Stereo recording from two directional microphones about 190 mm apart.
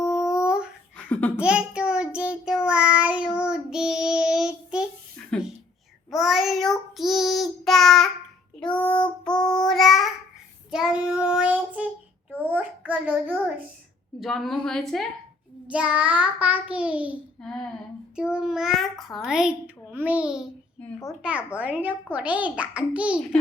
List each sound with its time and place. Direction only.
0.0 s a sound: 15° left (ahead or behind)
0.3 s a sound: 5° right (ahead or behind)
0.9 s laughter: 10° left (ahead or behind)
1.4 s a child's voice: 5° right (ahead or behind)
1.9 s child singing: 5° right (ahead or behind)
5.3 s a sound: centre (ahead or behind)
6.1 s child singing: centre (ahead or behind)
12.4 s a sound: 10° right (ahead or behind)
14.2 s a child's voice: centre (ahead or behind)
15.6 s child singing: 5° right (ahead or behind)
18.2 s a child's voice: 5° right (ahead or behind)
20.8 s a child's voice: 15° left (ahead or behind)
21.2 s child singing: 5° right (ahead or behind)